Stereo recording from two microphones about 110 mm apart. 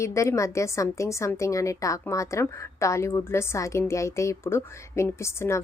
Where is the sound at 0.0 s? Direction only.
25° left (ahead or behind).